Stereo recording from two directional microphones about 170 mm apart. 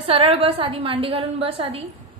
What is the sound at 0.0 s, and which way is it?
A woman's voice, 35° right (ahead or behind).